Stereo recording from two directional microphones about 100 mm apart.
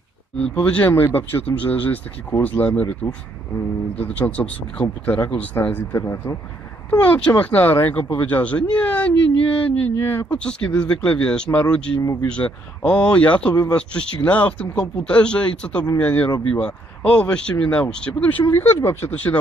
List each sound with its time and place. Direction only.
0.4 s speech: 10° left (ahead or behind)
6.9 s speech: 15° left (ahead or behind)
18.5 s speech: 25° left (ahead or behind)